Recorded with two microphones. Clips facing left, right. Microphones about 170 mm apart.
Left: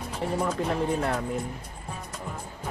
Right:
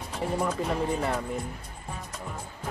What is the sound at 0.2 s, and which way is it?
Speech, centre (ahead or behind).